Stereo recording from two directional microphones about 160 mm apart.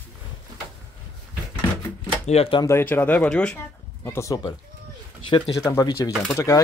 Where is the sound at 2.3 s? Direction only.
40° left (ahead or behind).